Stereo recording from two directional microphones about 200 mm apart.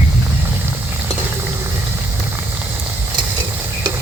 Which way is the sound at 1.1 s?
15° right (ahead or behind).